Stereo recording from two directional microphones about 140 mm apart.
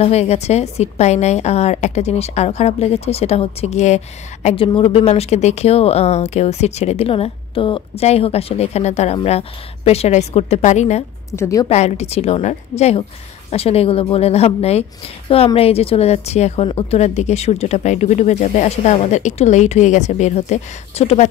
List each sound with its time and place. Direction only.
0.0 s speech: 50° left (ahead or behind)
11.3 s a woman's voice: 20° left (ahead or behind)
11.7 s a woman's voice: 50° left (ahead or behind)